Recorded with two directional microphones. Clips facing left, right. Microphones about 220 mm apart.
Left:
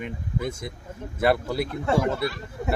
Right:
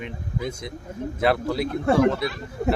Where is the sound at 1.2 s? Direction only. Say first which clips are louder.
Even; 5° left (ahead or behind).